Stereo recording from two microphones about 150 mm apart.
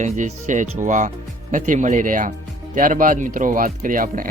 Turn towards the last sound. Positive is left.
turn(degrees=-65)  # may be behind; listen again after turning